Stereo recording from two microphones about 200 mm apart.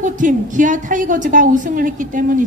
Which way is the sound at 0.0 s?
40° right (ahead or behind).